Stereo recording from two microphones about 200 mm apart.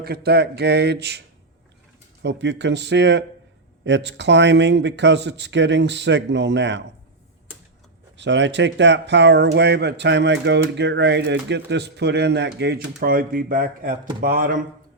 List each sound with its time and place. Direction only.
0.0 s speech: 50° right (ahead or behind)
2.2 s speech: 60° right (ahead or behind)
8.1 s speech: 65° right (ahead or behind); by 14.6 s 45° right (ahead or behind)